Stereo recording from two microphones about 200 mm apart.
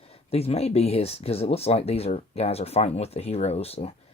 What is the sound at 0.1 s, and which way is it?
Speech, 30° left (ahead or behind).